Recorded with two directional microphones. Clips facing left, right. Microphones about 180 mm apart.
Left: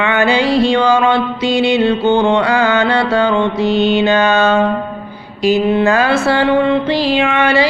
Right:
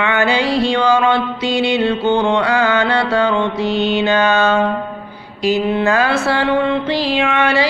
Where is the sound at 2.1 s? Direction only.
45° left (ahead or behind).